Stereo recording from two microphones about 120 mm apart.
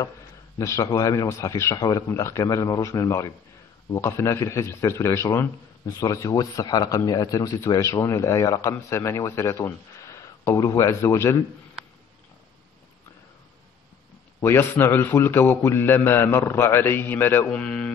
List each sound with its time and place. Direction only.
0.6 s speech: 25° left (ahead or behind)
5.9 s speech: 30° left (ahead or behind)
14.4 s speech: 20° left (ahead or behind)